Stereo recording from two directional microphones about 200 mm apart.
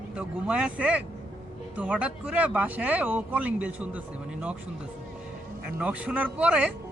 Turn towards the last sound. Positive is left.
turn(degrees=-5)  # may be behind; listen again after turning